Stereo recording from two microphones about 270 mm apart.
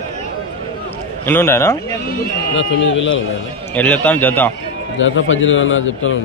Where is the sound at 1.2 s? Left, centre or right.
Centre.